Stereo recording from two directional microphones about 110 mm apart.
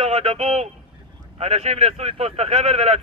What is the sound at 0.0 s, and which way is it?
Speech, 75° right (ahead or behind).